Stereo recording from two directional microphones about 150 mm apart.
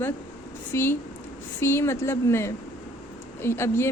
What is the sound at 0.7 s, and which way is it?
A woman's voice, 15° left (ahead or behind).